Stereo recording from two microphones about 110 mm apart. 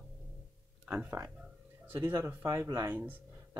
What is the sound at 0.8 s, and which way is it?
Speech, 15° right (ahead or behind).